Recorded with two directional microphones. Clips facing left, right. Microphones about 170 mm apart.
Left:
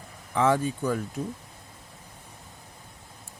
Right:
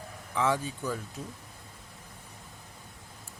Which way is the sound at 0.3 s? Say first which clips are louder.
Left 5 dB; 55° left (ahead or behind).